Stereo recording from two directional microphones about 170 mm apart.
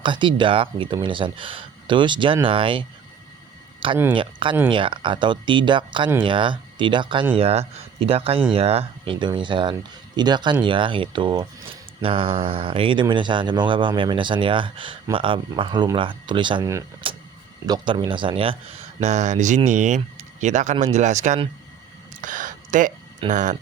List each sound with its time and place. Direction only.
0.0 s speech: 30° right (ahead or behind)
4.1 s speech: 30° right (ahead or behind)
18.9 s speech: 45° right (ahead or behind)
22.2 s a sound: 50° right (ahead or behind)
23.3 s speech: 45° right (ahead or behind)